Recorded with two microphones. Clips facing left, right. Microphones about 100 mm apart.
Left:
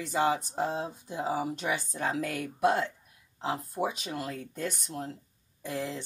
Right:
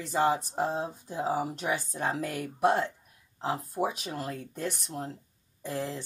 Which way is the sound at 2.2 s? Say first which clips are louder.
Right 1 dB; centre (ahead or behind).